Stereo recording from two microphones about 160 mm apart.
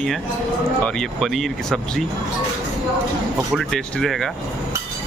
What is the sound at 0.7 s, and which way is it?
Speech, 5° left (ahead or behind).